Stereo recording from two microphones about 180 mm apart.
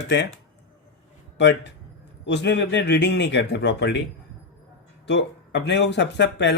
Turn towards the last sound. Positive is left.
turn(degrees=75)  # may be behind; listen again after turning